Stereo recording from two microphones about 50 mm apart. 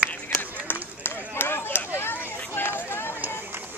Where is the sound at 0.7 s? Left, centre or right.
Left.